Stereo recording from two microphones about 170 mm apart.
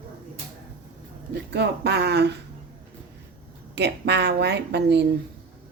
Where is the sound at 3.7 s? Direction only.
80° right.